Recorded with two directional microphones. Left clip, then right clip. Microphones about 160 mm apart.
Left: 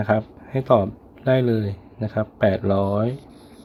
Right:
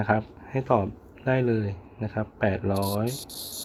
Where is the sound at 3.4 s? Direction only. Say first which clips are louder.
Right 8 dB; 90° right.